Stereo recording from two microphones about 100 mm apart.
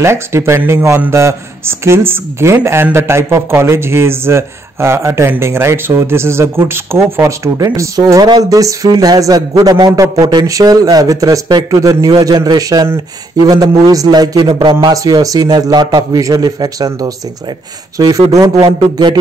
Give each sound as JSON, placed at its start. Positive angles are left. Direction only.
{"t": 0.0, "sound": "a man's voice", "side_deg": -25}